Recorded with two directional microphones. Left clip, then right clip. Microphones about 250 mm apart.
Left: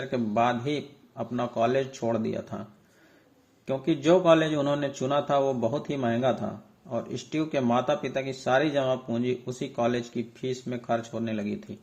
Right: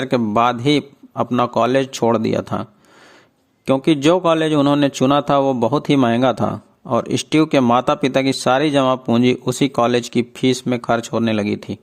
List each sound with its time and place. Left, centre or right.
0.1 s a man's voice: right
3.7 s a man's voice: right